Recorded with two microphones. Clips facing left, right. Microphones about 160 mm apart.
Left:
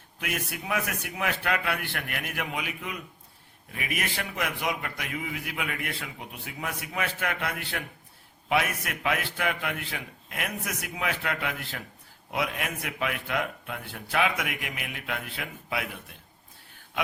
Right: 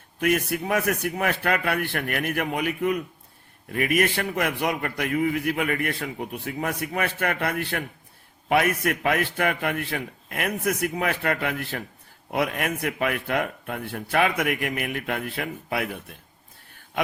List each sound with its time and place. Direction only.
0.2 s a man's voice: 50° right (ahead or behind)